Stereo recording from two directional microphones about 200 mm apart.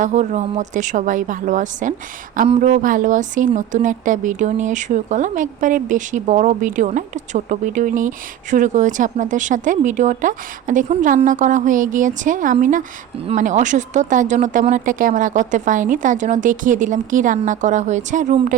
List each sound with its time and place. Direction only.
0.0 s a woman's voice: 35° right (ahead or behind)